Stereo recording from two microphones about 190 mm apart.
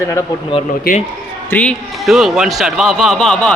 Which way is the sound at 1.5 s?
5° left (ahead or behind).